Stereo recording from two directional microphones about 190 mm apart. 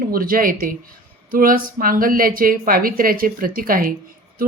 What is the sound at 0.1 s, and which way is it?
Speech, 50° right (ahead or behind).